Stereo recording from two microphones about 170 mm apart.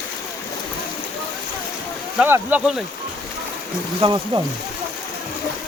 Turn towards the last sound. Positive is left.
turn(degrees=-25)  # may be behind; listen again after turning